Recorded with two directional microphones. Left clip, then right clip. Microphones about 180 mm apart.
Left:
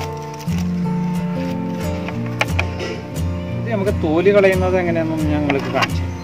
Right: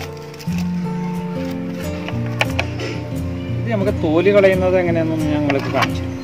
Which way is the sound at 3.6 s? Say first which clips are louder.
Right 1 dB; 20° right (ahead or behind).